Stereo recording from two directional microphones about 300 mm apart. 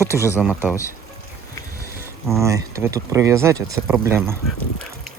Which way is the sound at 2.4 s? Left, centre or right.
Centre.